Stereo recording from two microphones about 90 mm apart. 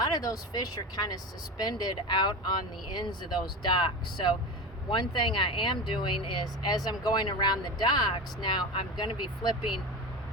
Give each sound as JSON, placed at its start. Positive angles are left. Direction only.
{"t": 0.0, "sound": "speech", "side_deg": 45}